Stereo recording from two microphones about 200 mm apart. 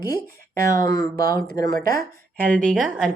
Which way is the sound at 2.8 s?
5° right (ahead or behind).